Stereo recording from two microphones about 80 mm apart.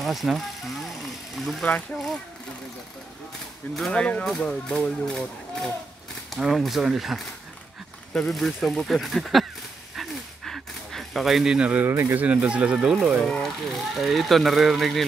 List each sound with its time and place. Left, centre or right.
0.0 s vehicle: centre
1.3 s speech: centre
3.9 s speech: centre
9.9 s a sound: centre
11.8 s speech: right
12.2 s speech: centre